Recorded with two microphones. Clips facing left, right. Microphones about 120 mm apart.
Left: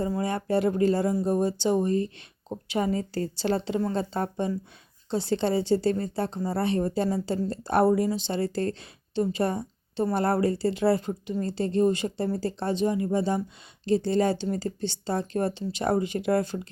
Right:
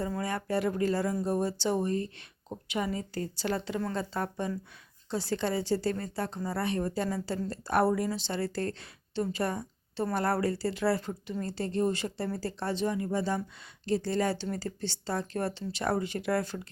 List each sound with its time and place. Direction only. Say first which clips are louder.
0.0 s a woman's voice: left 5 dB; 25° left (ahead or behind)
2.5 s a woman's voice: left 6 dB; 35° left (ahead or behind)